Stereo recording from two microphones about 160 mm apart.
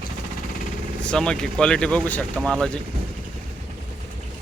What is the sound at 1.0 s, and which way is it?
Speech, 5° left (ahead or behind).